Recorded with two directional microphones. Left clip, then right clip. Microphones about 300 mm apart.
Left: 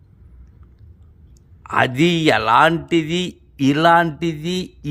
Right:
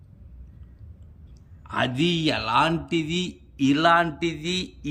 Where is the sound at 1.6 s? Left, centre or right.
Centre.